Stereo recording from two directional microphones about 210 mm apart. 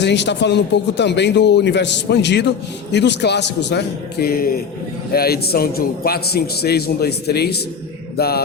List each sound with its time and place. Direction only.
0.0 s a man's voice: 55° left (ahead or behind)